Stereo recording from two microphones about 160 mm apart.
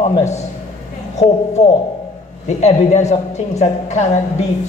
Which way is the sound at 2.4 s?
45° left (ahead or behind).